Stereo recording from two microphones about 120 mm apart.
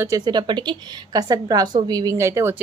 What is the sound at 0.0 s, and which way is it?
A woman's voice, 30° right (ahead or behind).